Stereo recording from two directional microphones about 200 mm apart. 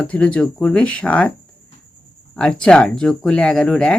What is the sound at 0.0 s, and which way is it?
Speech, 5° left (ahead or behind).